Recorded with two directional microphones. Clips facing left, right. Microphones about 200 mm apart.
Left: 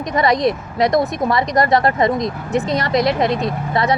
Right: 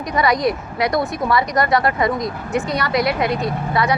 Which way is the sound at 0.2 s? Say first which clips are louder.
Left 2 dB; 25° left (ahead or behind).